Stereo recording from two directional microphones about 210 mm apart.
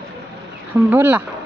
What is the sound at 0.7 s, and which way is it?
Speech, 10° right (ahead or behind).